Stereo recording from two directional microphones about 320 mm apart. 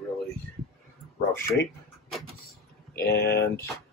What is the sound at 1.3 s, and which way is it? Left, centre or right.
Speech, centre.